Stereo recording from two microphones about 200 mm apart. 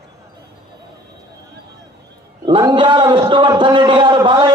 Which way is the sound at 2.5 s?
25° right (ahead or behind).